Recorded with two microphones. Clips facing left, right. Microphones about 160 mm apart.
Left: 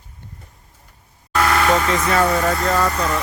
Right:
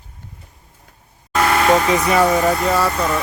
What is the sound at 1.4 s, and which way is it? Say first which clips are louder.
Speech: right 2 dB; 20° right (ahead or behind).